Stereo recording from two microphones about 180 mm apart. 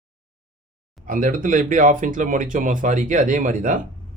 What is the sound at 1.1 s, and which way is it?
Speech, 50° right (ahead or behind).